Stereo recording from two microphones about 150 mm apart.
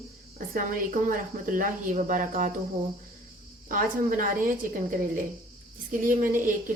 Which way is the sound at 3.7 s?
65° right (ahead or behind).